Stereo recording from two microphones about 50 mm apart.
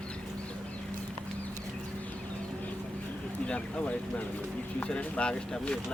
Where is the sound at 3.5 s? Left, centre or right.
Left.